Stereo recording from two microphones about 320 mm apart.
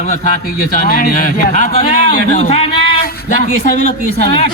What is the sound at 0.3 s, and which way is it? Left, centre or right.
A man's voice, left.